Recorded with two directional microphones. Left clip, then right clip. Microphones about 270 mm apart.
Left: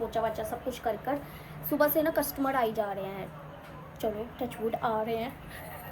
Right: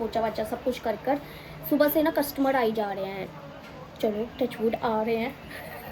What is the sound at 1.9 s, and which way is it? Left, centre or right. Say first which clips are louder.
Speech: right 3 dB; centre.